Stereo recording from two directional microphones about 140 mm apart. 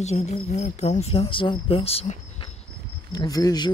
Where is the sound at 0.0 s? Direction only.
50° left (ahead or behind).